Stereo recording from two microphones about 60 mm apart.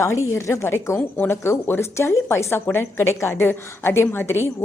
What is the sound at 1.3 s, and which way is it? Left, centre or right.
A woman's voice, left.